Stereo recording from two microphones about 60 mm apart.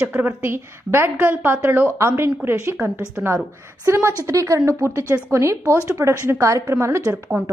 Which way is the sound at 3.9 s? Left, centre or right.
Right.